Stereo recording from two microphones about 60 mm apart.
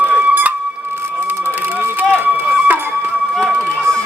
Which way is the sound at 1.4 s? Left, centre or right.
Right.